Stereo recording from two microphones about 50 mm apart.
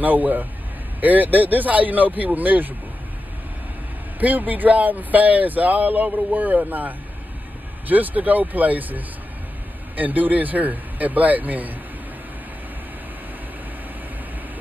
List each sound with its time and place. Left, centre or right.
0.0 s speech: right
4.2 s speech: right